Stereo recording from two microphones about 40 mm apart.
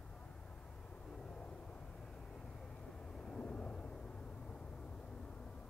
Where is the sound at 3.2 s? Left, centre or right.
Left.